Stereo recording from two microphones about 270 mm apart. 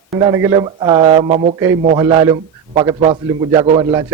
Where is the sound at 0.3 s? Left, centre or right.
Centre.